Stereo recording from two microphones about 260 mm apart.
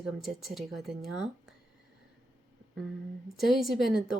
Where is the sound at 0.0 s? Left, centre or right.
Centre.